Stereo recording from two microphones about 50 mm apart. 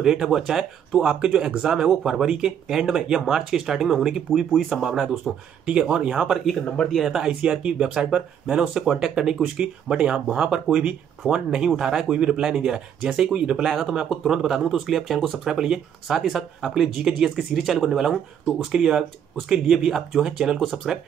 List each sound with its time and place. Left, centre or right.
0.0 s speech: centre
6.9 s speech: centre
7.6 s speech: centre
12.1 s speech: right; by 15.3 s centre
15.4 s speech: centre
16.8 s speech: centre